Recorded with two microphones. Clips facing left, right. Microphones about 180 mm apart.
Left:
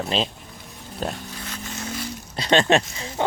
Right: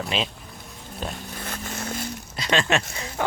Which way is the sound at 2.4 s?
30° left (ahead or behind).